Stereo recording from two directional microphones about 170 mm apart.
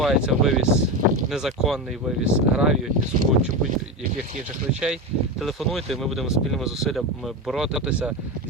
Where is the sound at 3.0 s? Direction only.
50° right (ahead or behind).